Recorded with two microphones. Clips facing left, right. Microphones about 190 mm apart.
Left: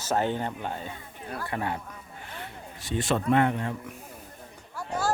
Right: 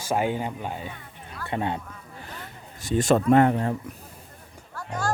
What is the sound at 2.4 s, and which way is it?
Speech, 45° right (ahead or behind).